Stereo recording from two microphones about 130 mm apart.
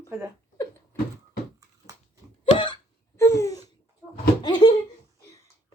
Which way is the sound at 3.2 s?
20° left (ahead or behind).